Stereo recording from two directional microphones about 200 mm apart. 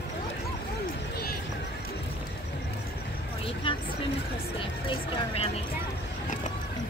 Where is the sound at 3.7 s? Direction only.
25° left (ahead or behind).